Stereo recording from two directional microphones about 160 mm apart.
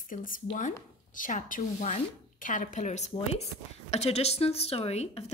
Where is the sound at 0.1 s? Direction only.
60° left (ahead or behind).